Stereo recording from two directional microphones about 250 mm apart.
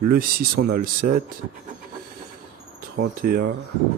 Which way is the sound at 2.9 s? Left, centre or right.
Right.